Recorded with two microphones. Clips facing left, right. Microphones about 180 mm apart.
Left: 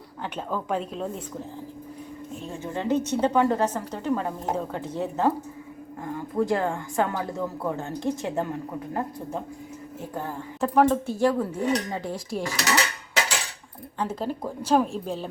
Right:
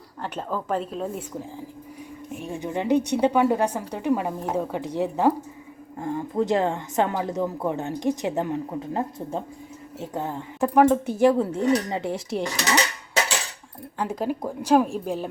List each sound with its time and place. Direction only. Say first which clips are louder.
0.2 s a woman's voice: right 1 dB; centre (ahead or behind)
6.0 s speech: right 2 dB; 25° right (ahead or behind)
14.0 s a woman's voice: right 2 dB; 10° right (ahead or behind)